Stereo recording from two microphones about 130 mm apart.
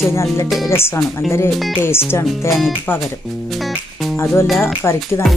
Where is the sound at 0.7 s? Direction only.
20° left (ahead or behind).